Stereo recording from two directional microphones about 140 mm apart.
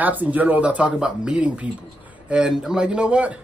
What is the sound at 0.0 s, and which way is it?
A woman's voice, 10° right (ahead or behind).